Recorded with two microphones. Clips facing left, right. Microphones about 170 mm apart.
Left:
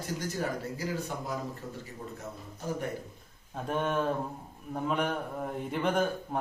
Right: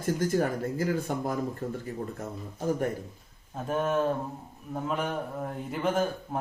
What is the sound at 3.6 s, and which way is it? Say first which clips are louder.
Speech: right 3 dB; 5° right (ahead or behind).